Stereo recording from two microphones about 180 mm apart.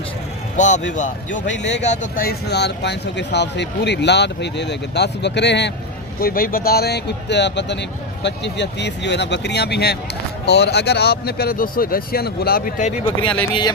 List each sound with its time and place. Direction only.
0.5 s speech: 45° left (ahead or behind)
1.3 s speech: 90° left
1.8 s speech: 40° left (ahead or behind); by 5.7 s 75° left (ahead or behind)
6.1 s speech: 55° left (ahead or behind)
13.5 s speech: 25° left (ahead or behind)